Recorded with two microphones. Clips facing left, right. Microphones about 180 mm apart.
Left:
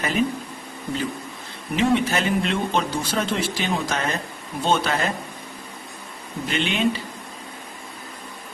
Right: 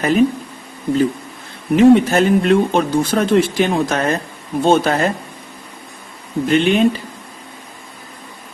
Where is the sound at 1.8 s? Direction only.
45° right (ahead or behind).